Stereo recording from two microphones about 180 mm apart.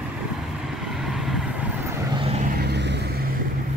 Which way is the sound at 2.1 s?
35° right (ahead or behind).